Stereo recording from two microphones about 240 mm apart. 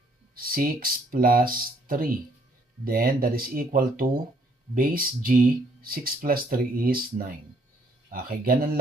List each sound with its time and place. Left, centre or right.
0.3 s speech: right